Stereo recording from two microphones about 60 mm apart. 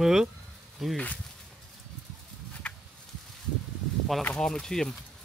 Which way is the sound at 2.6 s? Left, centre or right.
Centre.